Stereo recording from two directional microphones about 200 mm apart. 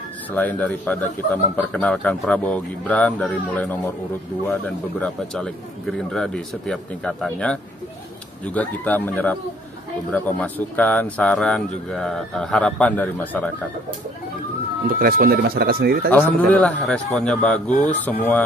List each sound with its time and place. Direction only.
0.3 s a man's voice: 10° left (ahead or behind)
8.5 s a man's voice: 10° left (ahead or behind)
15.0 s speech: 50° right (ahead or behind)
16.1 s speech: 10° left (ahead or behind)